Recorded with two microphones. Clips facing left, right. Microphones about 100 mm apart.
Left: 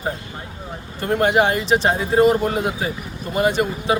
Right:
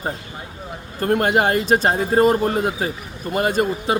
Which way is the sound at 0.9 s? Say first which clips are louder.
Even; 45° right (ahead or behind).